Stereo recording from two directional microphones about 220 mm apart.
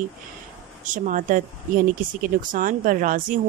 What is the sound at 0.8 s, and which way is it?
Speech, 35° right (ahead or behind).